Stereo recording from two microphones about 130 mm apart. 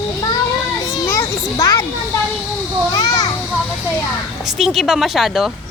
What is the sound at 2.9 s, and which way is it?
Children playing, 30° left (ahead or behind).